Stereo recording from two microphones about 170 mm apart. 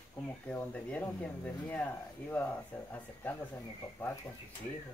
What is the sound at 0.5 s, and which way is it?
Speech, 10° left (ahead or behind).